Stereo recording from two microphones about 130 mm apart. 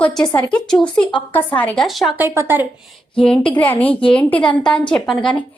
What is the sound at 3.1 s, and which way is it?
A woman's voice, 10° left (ahead or behind).